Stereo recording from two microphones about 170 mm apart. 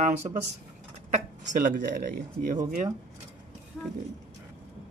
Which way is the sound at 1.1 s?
50° right (ahead or behind).